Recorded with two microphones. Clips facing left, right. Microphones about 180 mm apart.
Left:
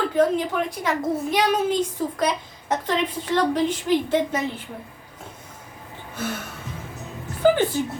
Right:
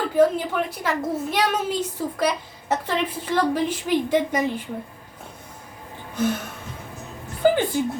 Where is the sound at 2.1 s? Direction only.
5° right (ahead or behind).